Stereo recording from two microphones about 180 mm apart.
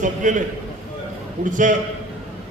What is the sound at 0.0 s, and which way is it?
Speech, 45° right (ahead or behind).